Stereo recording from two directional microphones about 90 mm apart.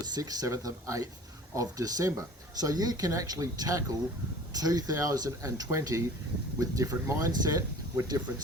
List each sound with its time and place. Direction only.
0.0 s speech: 50° right (ahead or behind)